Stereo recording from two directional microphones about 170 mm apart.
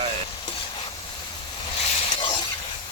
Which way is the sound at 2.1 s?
25° left (ahead or behind).